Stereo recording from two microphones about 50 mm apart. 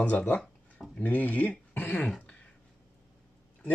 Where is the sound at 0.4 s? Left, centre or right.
Centre.